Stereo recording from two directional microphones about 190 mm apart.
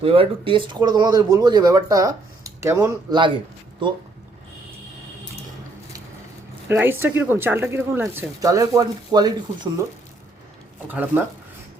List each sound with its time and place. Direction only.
0.0 s speech: 30° right (ahead or behind)
6.7 s speech: 10° right (ahead or behind)
10.8 s speech: 10° right (ahead or behind)